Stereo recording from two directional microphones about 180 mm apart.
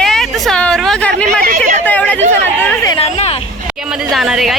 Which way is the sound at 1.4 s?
50° right (ahead or behind).